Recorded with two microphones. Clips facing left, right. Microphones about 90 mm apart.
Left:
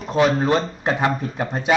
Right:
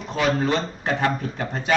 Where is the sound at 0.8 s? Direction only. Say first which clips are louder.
Even; 15° left (ahead or behind).